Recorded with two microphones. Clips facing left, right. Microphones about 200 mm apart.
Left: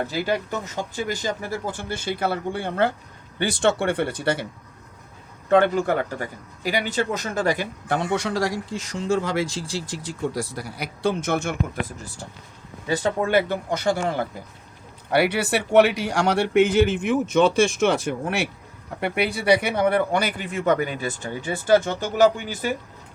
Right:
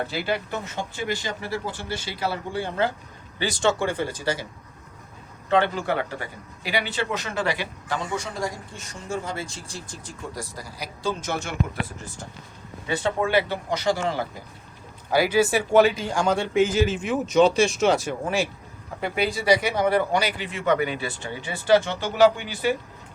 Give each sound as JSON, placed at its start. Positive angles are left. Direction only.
{"t": 0.1, "sound": "a man's voice", "side_deg": 40}
{"t": 5.5, "sound": "a man's voice", "side_deg": 50}
{"t": 12.9, "sound": "speech", "side_deg": 40}
{"t": 15.1, "sound": "a man's voice", "side_deg": 65}